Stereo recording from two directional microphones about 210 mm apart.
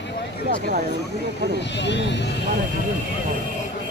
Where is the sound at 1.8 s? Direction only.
55° left (ahead or behind).